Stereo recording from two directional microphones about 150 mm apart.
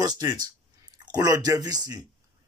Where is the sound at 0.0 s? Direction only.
25° right (ahead or behind).